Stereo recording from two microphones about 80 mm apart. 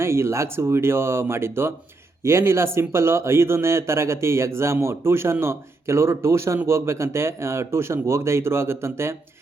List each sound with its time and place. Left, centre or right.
0.0 s speech: right